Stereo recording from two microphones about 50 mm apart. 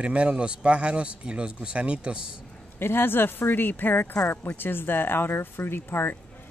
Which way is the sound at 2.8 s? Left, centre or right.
Left.